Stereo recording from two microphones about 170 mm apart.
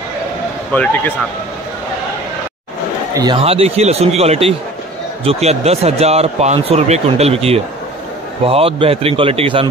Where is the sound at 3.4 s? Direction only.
35° right (ahead or behind).